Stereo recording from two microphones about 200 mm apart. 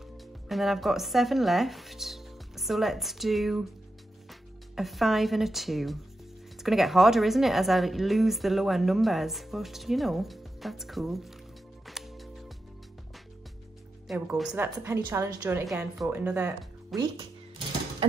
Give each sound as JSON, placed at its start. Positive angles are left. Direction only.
{"t": 0.5, "sound": "a woman's voice", "side_deg": 0}
{"t": 11.8, "sound": "music", "side_deg": 0}
{"t": 14.0, "sound": "a woman's voice", "side_deg": -5}
{"t": 16.0, "sound": "a woman's voice", "side_deg": -5}
{"t": 16.9, "sound": "speech", "side_deg": -20}